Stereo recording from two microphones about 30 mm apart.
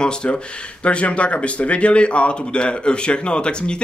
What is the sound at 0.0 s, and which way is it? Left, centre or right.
Speech, left.